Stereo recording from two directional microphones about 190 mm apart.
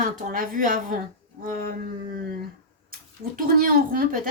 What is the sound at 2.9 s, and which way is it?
Speech, 50° right (ahead or behind).